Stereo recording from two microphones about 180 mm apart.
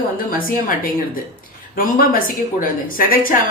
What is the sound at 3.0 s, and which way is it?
Speech, 50° left (ahead or behind).